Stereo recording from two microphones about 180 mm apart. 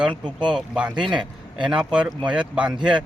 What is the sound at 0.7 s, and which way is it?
Speech, 5° right (ahead or behind).